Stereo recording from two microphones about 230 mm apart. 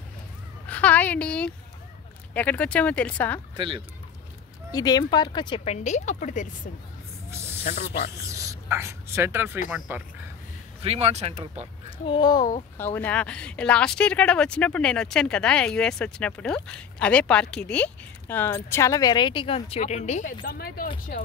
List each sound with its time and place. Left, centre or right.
0.7 s a sound: centre
2.3 s speech: centre
3.5 s speech: right
4.7 s speech: centre; by 6.7 s left
7.2 s snake: centre
7.6 s speech: left
8.1 s speech: centre
10.8 s speech: right
12.1 s speech: centre; by 20.9 s left